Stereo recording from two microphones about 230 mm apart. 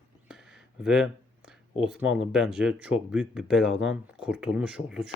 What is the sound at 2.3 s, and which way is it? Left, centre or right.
Speech, centre.